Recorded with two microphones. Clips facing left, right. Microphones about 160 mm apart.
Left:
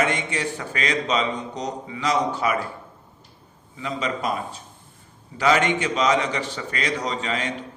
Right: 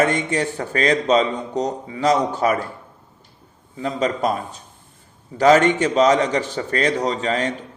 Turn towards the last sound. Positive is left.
turn(degrees=-40)  # may be behind; listen again after turning